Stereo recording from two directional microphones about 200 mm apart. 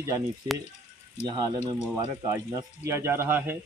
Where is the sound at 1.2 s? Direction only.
20° right (ahead or behind).